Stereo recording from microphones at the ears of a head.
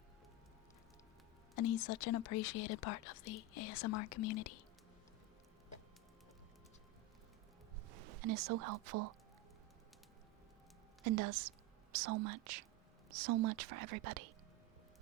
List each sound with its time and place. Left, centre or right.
1.5 s speech: left
7.9 s speech: right
11.0 s a woman's voice: right